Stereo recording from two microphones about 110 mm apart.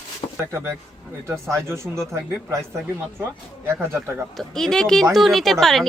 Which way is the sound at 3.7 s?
25° right (ahead or behind).